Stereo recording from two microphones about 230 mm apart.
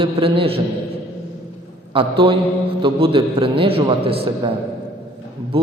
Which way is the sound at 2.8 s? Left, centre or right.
Right.